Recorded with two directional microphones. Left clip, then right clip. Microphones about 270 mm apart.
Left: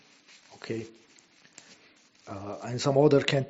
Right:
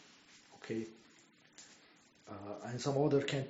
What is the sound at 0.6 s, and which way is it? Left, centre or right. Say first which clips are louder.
Speech: left 7 dB; left.